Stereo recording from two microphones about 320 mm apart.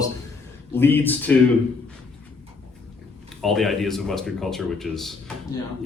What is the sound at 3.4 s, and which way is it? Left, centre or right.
Speech, centre.